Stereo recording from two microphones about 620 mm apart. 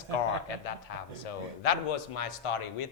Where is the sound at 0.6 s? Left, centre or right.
Left.